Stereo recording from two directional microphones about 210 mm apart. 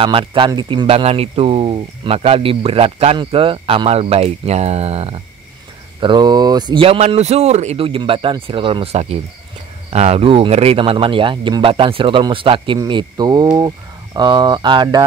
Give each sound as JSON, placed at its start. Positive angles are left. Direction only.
{"t": 0.0, "sound": "speech", "side_deg": -25}